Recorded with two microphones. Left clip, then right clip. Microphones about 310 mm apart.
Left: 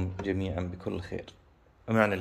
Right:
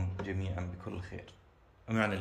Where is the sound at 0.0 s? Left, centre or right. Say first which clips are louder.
Left 8 dB; left.